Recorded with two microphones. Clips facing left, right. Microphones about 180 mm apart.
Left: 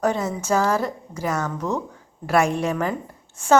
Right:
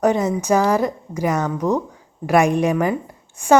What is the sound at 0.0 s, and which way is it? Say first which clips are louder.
A woman's voice: right 5 dB; 20° right (ahead or behind).